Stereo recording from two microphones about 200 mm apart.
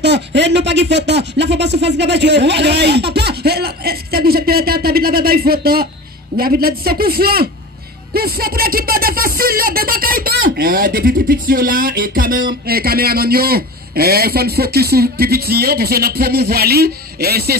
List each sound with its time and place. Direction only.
0.0 s speech: 60° right (ahead or behind)